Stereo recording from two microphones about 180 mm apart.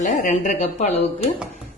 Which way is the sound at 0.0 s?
45° left (ahead or behind).